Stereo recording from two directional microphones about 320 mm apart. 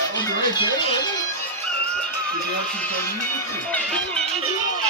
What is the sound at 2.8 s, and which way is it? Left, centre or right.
Speech, centre.